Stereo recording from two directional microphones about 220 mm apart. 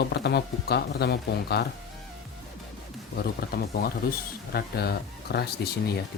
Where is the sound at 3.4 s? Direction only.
45° left (ahead or behind).